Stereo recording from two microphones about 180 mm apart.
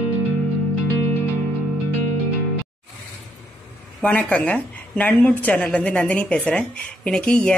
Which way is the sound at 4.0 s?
5° left (ahead or behind).